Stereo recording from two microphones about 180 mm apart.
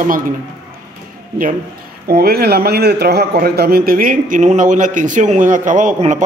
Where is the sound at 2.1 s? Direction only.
60° right (ahead or behind).